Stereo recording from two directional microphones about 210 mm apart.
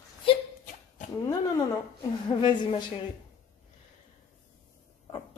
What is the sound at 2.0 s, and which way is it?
Speech, 20° left (ahead or behind).